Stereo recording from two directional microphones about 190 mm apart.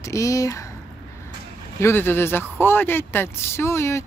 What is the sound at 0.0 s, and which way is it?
Speech, 15° left (ahead or behind).